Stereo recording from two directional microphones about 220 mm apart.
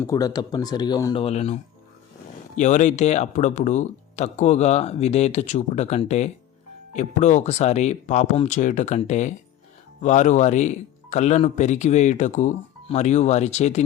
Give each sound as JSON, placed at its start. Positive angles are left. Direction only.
{"t": 0.0, "sound": "speech", "side_deg": 15}
{"t": 1.2, "sound": "speech", "side_deg": 30}
{"t": 2.6, "sound": "speech", "side_deg": 35}